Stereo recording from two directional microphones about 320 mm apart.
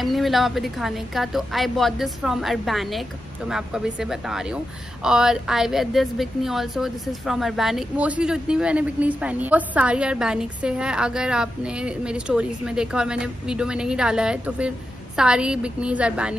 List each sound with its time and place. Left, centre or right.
0.0 s a woman's voice: centre